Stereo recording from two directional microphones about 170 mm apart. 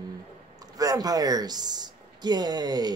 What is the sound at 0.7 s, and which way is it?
Speech, 20° right (ahead or behind).